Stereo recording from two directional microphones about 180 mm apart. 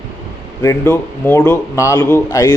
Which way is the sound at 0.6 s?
15° left (ahead or behind).